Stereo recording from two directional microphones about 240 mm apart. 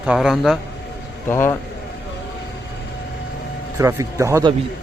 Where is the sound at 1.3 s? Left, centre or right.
Centre.